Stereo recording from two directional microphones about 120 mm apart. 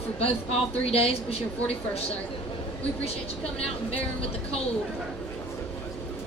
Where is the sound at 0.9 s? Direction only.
55° left (ahead or behind).